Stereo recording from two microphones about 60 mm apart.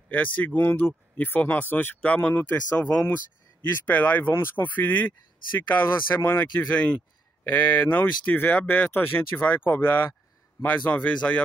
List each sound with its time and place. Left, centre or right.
0.1 s speech: left
0.7 s speech: left
4.3 s speech: left
4.6 s speech: left
7.4 s speech: left